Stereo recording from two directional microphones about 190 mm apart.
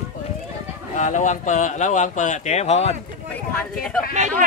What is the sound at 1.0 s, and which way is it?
Speech, 40° left (ahead or behind).